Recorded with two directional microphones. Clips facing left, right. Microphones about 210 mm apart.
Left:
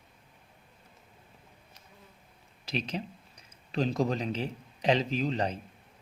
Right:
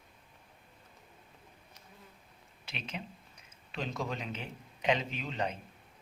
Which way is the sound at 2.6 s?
35° left (ahead or behind).